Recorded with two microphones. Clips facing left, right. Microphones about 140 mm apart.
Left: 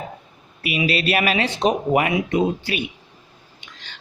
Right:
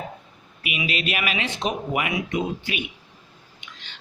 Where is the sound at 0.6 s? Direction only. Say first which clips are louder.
Left 6 dB; 35° left (ahead or behind).